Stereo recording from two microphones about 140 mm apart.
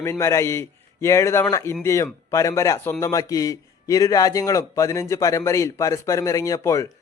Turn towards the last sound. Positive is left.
turn(degrees=20)  # may be behind; listen again after turning